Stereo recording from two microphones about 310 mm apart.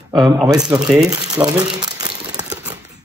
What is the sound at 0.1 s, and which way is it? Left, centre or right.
Speech, centre.